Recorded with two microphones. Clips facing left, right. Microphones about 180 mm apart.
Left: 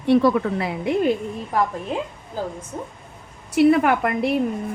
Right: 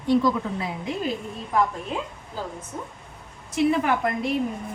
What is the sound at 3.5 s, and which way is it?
Speech, 65° left (ahead or behind).